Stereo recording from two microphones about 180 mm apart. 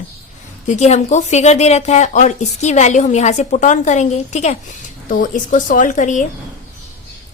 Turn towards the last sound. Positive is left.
turn(degrees=45)  # may be behind; listen again after turning